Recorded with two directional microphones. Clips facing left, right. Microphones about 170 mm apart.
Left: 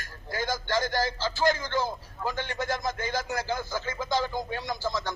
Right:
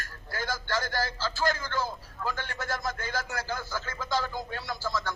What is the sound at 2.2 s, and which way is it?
Speech, 15° left (ahead or behind).